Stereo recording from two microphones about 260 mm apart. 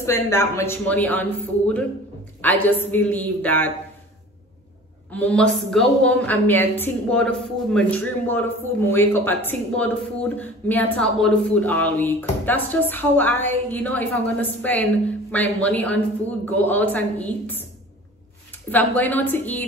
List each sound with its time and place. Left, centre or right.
0.0 s a woman's voice: centre
2.4 s a woman's voice: centre
5.1 s a woman's voice: centre
18.7 s a woman's voice: centre